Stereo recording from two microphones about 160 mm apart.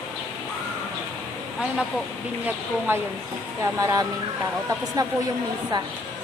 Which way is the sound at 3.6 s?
20° right (ahead or behind).